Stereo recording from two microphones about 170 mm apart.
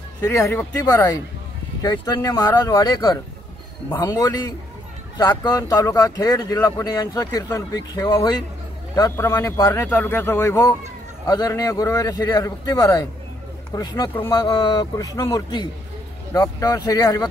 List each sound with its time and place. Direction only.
0.2 s speech: 15° left (ahead or behind)